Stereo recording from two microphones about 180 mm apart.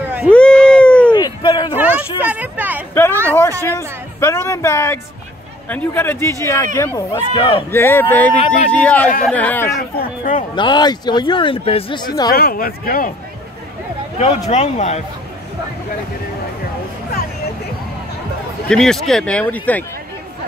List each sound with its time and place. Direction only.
0.3 s cat: 5° left (ahead or behind)
1.1 s a sound: 25° left (ahead or behind)
1.8 s a sound: 10° right (ahead or behind)
2.9 s a sound: 15° left (ahead or behind)
3.3 s speech: 15° left (ahead or behind)
7.7 s speech: 10° left (ahead or behind)
9.8 s speech: 55° left (ahead or behind)
10.5 s speech: 25° left (ahead or behind)
12.3 s speech: 55° left (ahead or behind)
14.5 s speech: 40° left (ahead or behind)
18.7 s speech: 5° left (ahead or behind)